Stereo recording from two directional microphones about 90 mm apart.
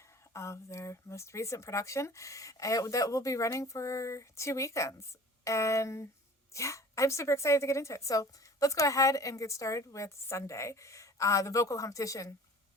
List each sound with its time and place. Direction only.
0.3 s a woman's voice: 30° left (ahead or behind)